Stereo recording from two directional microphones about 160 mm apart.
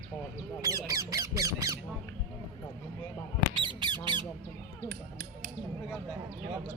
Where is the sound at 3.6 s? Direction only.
30° right (ahead or behind).